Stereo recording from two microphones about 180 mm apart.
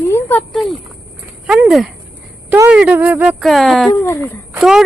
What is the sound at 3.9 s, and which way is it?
Speech, 15° left (ahead or behind).